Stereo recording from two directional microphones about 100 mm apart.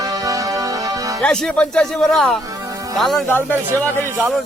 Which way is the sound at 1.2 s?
5° left (ahead or behind).